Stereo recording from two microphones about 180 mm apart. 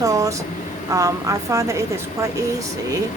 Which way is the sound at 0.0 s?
20° right (ahead or behind).